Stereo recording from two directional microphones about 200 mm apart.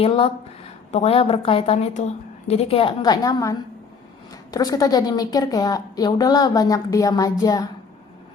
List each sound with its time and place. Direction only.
0.0 s a woman's voice: 30° left (ahead or behind)